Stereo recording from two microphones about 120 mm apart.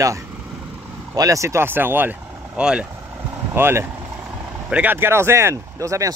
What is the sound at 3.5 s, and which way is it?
Speech, 20° right (ahead or behind).